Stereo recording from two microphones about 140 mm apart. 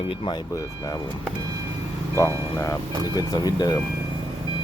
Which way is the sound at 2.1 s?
20° left (ahead or behind).